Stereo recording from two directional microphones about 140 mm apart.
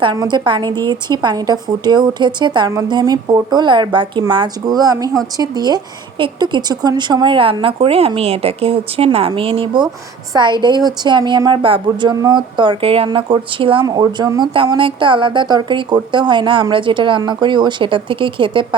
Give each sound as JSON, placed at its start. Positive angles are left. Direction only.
{"t": 0.0, "sound": "a woman's voice", "side_deg": -30}